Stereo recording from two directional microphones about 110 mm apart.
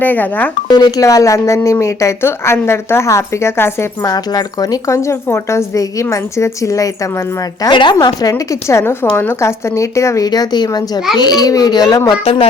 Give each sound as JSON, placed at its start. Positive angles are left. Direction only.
{"t": 0.0, "sound": "speech", "side_deg": 15}
{"t": 0.7, "sound": "speech", "side_deg": 35}
{"t": 7.6, "sound": "a woman's voice", "side_deg": 45}
{"t": 7.9, "sound": "a woman's voice", "side_deg": 35}
{"t": 12.2, "sound": "speech", "side_deg": 65}